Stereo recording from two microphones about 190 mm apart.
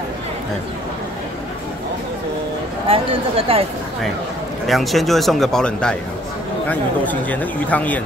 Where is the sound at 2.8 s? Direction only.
30° right (ahead or behind).